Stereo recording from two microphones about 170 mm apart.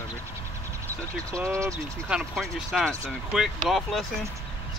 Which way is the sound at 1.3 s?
15° right (ahead or behind).